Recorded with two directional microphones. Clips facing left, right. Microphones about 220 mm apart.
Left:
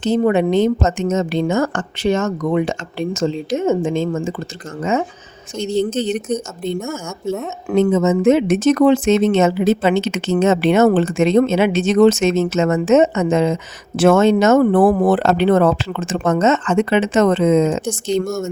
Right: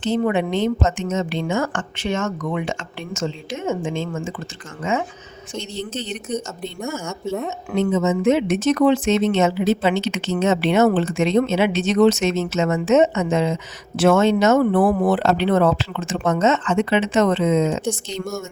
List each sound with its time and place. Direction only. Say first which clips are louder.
0.0 s a woman's voice: left 5 dB; 40° left (ahead or behind)